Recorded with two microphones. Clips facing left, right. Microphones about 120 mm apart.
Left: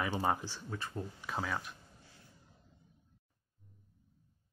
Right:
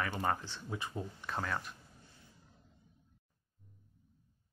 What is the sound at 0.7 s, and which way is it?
Speech, 15° right (ahead or behind).